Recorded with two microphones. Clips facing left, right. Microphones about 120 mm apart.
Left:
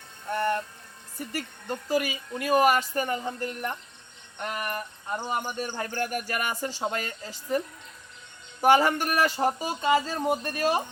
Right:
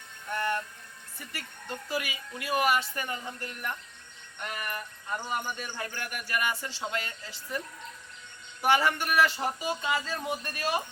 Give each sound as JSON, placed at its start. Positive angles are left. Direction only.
{"t": 1.2, "sound": "speech", "side_deg": 40}
{"t": 8.6, "sound": "speech", "side_deg": 40}